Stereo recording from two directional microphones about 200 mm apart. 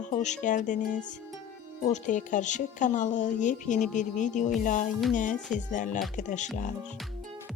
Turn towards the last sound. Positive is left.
turn(degrees=35)  # may be behind; listen again after turning